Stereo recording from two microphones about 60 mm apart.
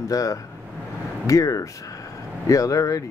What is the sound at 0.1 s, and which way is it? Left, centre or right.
Speech, left.